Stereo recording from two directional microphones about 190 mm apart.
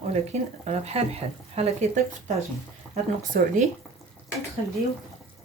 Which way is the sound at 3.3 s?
50° right (ahead or behind).